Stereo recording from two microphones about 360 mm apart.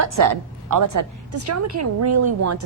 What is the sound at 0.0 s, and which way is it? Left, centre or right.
A woman's voice, right.